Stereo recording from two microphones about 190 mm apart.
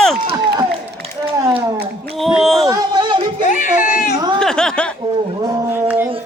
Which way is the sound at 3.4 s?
40° left (ahead or behind).